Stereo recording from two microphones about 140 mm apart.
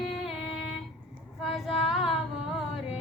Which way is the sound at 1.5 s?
5° right (ahead or behind).